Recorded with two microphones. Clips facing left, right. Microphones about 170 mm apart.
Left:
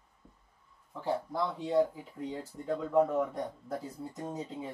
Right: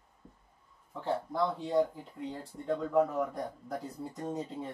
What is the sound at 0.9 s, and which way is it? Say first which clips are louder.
Speech: even; 10° left (ahead or behind).